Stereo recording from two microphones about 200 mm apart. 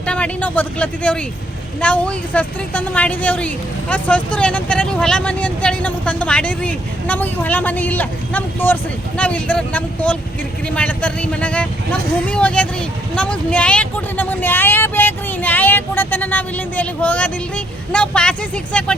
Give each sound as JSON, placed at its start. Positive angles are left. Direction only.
{"t": 0.0, "sound": "a woman's voice", "side_deg": 5}